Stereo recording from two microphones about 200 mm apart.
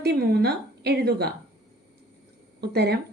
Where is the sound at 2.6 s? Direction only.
55° right (ahead or behind).